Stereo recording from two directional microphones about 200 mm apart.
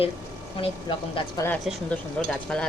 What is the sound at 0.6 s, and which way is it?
Speech, 25° left (ahead or behind).